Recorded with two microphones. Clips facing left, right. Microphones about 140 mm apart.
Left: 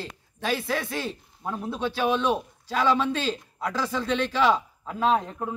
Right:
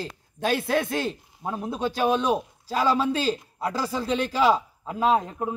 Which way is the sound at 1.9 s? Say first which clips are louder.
Right 2 dB; 45° right (ahead or behind).